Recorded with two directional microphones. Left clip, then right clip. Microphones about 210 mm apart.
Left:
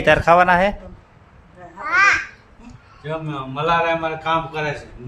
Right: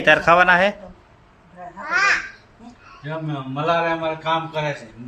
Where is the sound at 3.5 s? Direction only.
30° left (ahead or behind).